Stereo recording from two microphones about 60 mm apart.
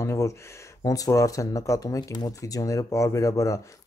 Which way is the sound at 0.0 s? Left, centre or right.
Left.